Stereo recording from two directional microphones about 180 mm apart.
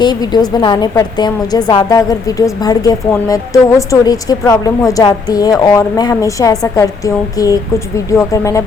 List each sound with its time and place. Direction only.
0.0 s a woman's voice: 25° left (ahead or behind)